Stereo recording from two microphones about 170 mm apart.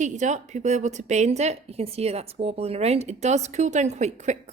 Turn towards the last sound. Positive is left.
turn(degrees=-40)  # may be behind; listen again after turning